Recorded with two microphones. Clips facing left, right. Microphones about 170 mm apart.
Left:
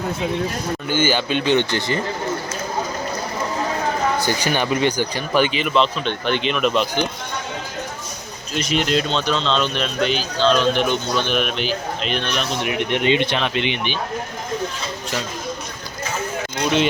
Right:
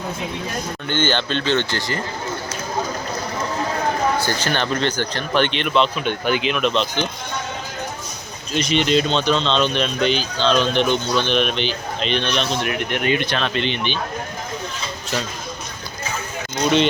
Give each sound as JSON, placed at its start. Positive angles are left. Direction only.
{"t": 0.9, "sound": "speech", "side_deg": 10}
{"t": 4.2, "sound": "speech", "side_deg": 15}
{"t": 8.5, "sound": "a man's voice", "side_deg": 0}
{"t": 12.6, "sound": "speech", "side_deg": 20}